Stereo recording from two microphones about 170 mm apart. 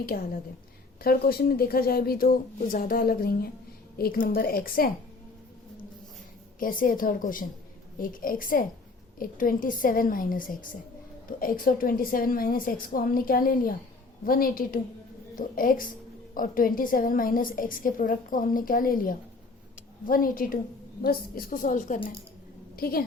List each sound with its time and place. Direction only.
0.0 s a woman's voice: 60° left (ahead or behind)
6.6 s a woman's voice: 55° left (ahead or behind)
22.7 s a woman's voice: 60° left (ahead or behind)